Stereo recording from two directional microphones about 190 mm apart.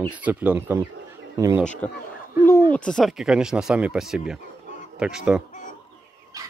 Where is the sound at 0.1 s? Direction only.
10° right (ahead or behind).